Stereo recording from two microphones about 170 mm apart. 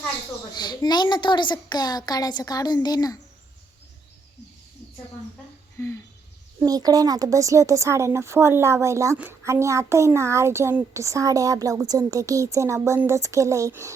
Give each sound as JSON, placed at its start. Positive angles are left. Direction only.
{"t": 0.5, "sound": "a woman's voice", "side_deg": 25}
{"t": 5.7, "sound": "a sound", "side_deg": 15}
{"t": 6.7, "sound": "speech", "side_deg": -20}